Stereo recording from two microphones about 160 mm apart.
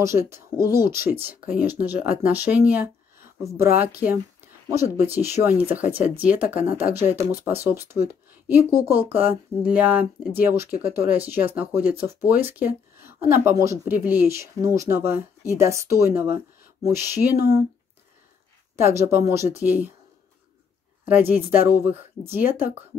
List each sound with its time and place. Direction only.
0.0 s speech: 15° right (ahead or behind)
18.8 s speech: 15° right (ahead or behind)
21.1 s speech: 10° right (ahead or behind)